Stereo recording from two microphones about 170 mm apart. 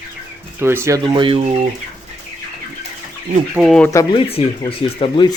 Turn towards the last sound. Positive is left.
turn(degrees=30)  # may be behind; listen again after turning